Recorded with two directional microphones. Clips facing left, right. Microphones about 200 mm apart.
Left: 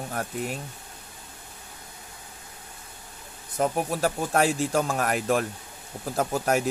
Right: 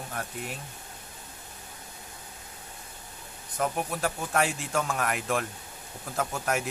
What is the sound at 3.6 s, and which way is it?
Speech, 35° left (ahead or behind).